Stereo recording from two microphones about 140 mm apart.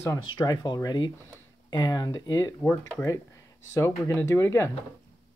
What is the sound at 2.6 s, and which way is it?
Speech, 15° left (ahead or behind).